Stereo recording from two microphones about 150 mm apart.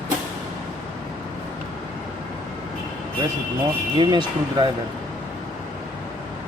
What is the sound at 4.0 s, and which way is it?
Speech, 30° right (ahead or behind).